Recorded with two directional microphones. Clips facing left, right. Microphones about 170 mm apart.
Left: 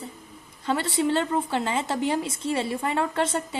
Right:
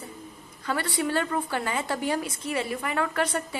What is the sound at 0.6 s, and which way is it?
Speech, 25° left (ahead or behind).